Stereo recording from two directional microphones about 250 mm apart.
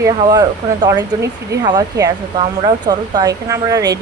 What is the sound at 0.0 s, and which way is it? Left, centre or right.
Speech, centre.